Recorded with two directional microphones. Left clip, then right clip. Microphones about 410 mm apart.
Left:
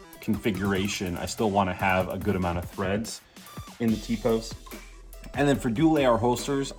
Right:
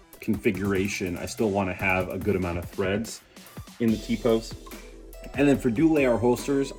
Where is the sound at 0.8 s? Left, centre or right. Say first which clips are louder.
Right 1 dB; left.